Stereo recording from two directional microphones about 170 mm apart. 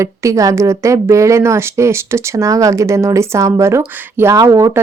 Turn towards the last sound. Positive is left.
turn(degrees=-15)  # may be behind; listen again after turning